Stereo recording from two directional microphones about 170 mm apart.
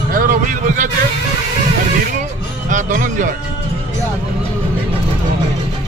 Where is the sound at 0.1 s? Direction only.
55° right (ahead or behind).